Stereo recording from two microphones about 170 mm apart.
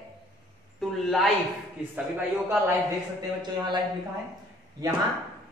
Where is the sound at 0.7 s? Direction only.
Centre (ahead or behind).